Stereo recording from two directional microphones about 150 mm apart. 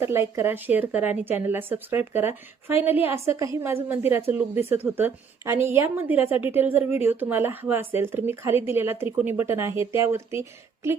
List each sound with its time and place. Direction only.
0.0 s a woman's voice: 15° right (ahead or behind)